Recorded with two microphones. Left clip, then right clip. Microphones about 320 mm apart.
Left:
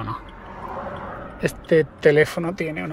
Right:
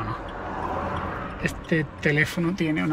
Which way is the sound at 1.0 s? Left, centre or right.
Right.